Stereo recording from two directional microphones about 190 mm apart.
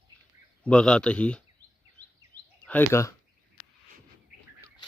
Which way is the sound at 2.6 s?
10° left (ahead or behind).